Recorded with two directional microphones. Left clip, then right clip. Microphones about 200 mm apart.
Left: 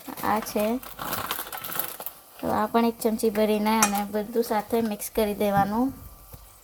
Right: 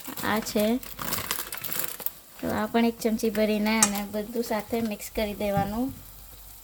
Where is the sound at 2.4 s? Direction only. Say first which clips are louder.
Left 3 dB; 10° right (ahead or behind); by 5.7 s 5° left (ahead or behind).